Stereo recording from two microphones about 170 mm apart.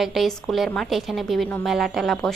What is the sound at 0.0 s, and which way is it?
A woman's voice, centre (ahead or behind).